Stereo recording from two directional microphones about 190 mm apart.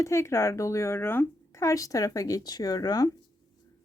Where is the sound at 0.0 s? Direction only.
15° left (ahead or behind).